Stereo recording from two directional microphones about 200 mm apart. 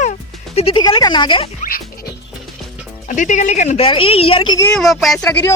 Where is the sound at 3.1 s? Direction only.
40° left (ahead or behind); by 4.7 s 20° left (ahead or behind).